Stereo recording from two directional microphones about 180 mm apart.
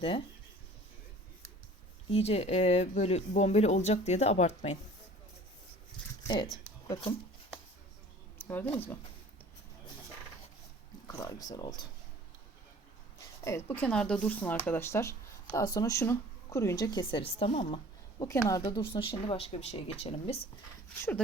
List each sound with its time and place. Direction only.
2.0 s speech: 35° left (ahead or behind)
6.2 s speech: 25° left (ahead or behind)
8.4 s a sound: 10° left (ahead or behind)
8.6 s speech: 35° left (ahead or behind)
11.1 s speech: 20° left (ahead or behind)
13.4 s speech: 15° left (ahead or behind); by 20.5 s 30° left (ahead or behind)